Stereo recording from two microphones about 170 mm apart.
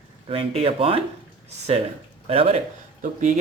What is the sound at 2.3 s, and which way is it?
Speech, 35° right (ahead or behind).